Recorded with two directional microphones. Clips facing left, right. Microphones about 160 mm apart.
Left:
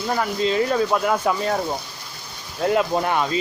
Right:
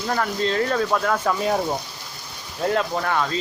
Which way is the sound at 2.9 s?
20° left (ahead or behind).